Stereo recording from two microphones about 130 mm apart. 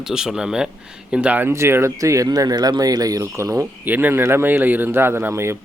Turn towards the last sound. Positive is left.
turn(degrees=-20)  # may be behind; listen again after turning